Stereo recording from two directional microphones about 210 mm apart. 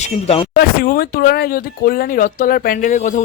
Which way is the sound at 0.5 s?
45° left (ahead or behind).